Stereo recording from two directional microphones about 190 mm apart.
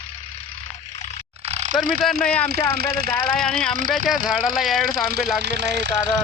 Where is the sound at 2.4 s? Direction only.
55° right (ahead or behind).